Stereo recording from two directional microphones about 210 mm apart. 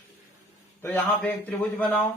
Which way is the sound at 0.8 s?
10° left (ahead or behind).